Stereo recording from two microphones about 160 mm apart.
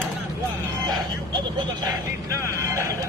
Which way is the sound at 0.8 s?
25° right (ahead or behind).